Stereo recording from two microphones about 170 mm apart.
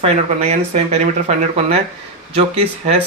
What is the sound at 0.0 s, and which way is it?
Speech, 40° right (ahead or behind).